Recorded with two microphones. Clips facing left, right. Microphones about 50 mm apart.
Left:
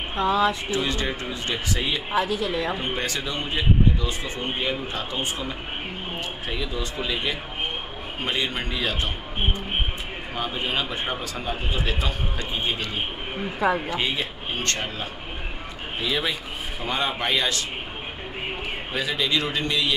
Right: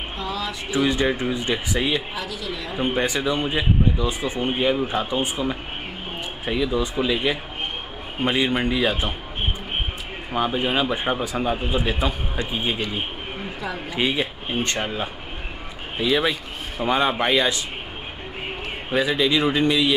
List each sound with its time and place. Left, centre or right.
0.2 s speech: left
0.7 s speech: centre
2.1 s speech: left
2.8 s speech: centre
10.3 s speech: centre
18.9 s speech: centre